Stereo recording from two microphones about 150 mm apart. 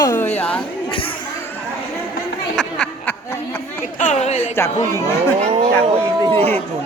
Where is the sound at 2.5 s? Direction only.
Centre (ahead or behind).